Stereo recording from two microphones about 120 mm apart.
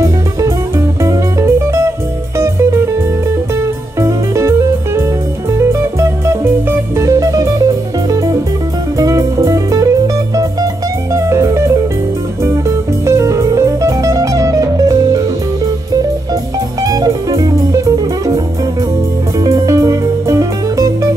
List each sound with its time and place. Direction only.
0.0 s music: 25° right (ahead or behind)
16.8 s music: 30° right (ahead or behind)
19.4 s music: 30° right (ahead or behind)